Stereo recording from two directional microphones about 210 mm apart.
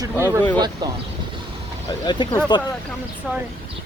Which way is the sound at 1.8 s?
20° left (ahead or behind).